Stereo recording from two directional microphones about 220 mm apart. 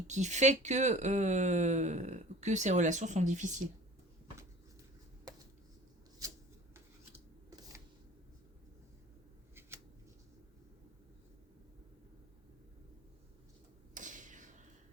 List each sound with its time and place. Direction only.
0.1 s speech: 30° right (ahead or behind)
9.6 s scissors: 10° right (ahead or behind)
13.9 s a sound: 35° right (ahead or behind)